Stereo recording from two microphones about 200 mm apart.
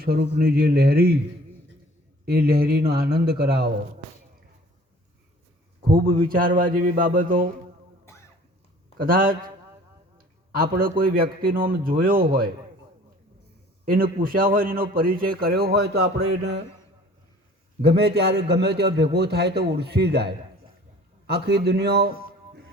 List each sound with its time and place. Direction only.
0.0 s a man's voice: 50° right (ahead or behind)
2.2 s a man's voice: 50° right (ahead or behind)
6.2 s a man's voice: 45° right (ahead or behind)
9.0 s a man's voice: 45° right (ahead or behind)
13.8 s a man's voice: 45° right (ahead or behind)
17.8 s a man's voice: 55° right (ahead or behind)